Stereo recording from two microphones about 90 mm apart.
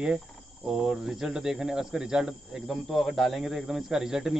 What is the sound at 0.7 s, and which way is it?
Speech, 5° right (ahead or behind).